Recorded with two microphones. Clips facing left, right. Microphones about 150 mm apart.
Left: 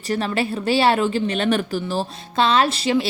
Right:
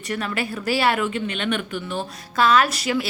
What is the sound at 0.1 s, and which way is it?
A woman's voice, 30° left (ahead or behind).